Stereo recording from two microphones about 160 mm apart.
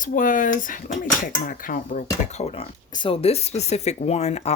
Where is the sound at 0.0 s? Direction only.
55° left (ahead or behind).